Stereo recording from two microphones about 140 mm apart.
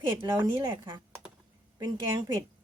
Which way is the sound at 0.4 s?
35° right (ahead or behind).